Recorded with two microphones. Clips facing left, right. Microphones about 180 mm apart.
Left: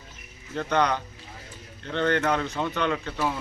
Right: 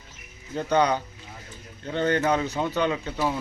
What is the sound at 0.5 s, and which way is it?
Speech, 10° right (ahead or behind).